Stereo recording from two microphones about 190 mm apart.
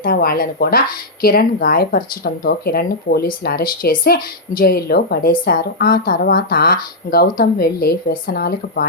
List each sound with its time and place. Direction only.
0.0 s speech: 50° left (ahead or behind)